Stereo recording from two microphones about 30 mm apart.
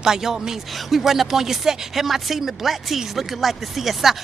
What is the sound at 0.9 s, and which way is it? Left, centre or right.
Speech, centre.